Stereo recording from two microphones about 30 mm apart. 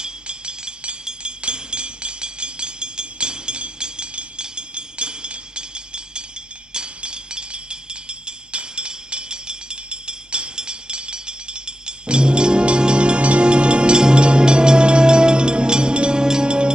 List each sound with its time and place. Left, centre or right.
0.0 s chink: right
6.7 s music: right